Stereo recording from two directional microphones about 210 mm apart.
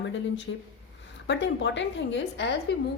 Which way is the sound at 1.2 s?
55° left (ahead or behind).